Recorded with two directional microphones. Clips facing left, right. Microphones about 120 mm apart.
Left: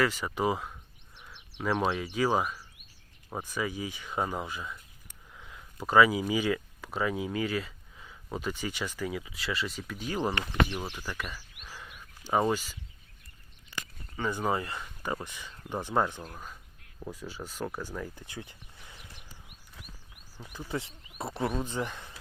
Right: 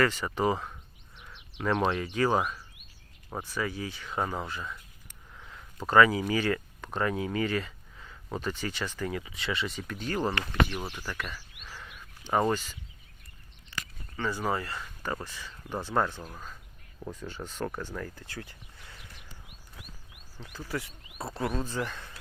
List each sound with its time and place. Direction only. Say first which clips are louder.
0.0 s speech: right 2 dB; 10° left (ahead or behind)
10.9 s a sound: right 1 dB; 10° left (ahead or behind)
14.2 s speech: left 1 dB; 15° left (ahead or behind)
20.4 s speech: even; 15° left (ahead or behind)